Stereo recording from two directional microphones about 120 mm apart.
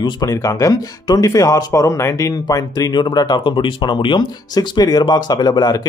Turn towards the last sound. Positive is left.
turn(degrees=35)  # may be behind; listen again after turning